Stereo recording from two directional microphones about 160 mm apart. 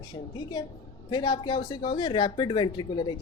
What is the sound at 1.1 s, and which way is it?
Speech, 25° left (ahead or behind).